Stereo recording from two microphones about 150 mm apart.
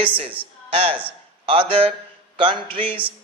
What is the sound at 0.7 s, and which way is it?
A man's voice, 40° right (ahead or behind).